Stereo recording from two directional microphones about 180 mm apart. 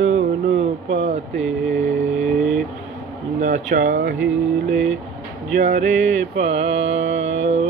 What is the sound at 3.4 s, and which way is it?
Mantra, 45° right (ahead or behind).